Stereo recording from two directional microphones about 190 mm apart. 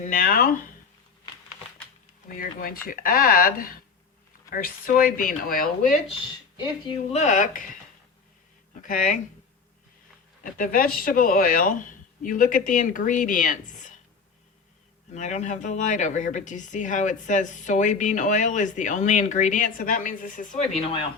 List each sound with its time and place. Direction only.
0.0 s speech: 50° left (ahead or behind)
2.3 s speech: 50° left (ahead or behind)
8.7 s speech: 45° left (ahead or behind)
10.4 s speech: 45° left (ahead or behind)
15.1 s speech: 40° left (ahead or behind)